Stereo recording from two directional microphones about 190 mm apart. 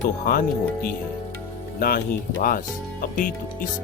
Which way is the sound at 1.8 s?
50° left (ahead or behind).